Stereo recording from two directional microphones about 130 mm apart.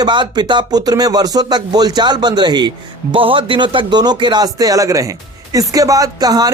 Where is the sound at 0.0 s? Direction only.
35° right (ahead or behind).